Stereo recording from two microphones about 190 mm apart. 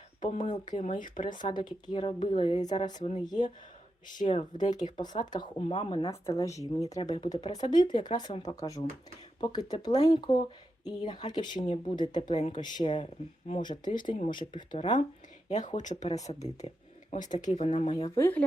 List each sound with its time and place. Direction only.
0.2 s speech: 40° left (ahead or behind)
1.5 s a woman's voice: 25° left (ahead or behind)
2.9 s speech: 35° left (ahead or behind)
5.3 s a woman's voice: 25° left (ahead or behind)
6.1 s a woman's voice: 15° left (ahead or behind)
15.4 s speech: 40° left (ahead or behind)
17.9 s a woman's voice: 25° left (ahead or behind)
18.2 s speech: 10° left (ahead or behind)